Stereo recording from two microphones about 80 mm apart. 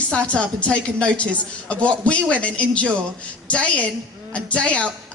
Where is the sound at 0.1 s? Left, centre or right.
Centre.